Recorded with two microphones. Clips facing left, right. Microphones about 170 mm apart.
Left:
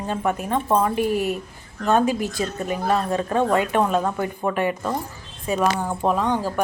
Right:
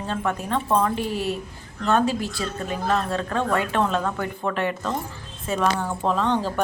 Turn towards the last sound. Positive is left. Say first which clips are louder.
# left 1 dB
turn(degrees=10)  # may be behind; listen again after turning